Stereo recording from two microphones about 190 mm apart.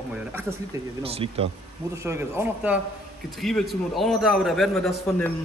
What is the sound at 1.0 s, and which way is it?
Speech, 30° right (ahead or behind).